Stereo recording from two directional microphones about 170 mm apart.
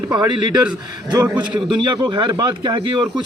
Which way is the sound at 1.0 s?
25° right (ahead or behind).